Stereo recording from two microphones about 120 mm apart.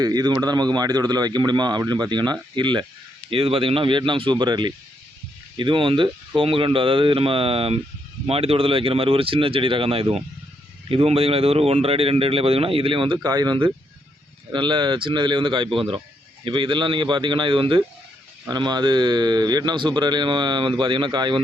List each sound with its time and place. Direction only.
0.0 s speech: 35° right (ahead or behind)
3.2 s a man's voice: 50° right (ahead or behind)
13.2 s speech: 35° right (ahead or behind)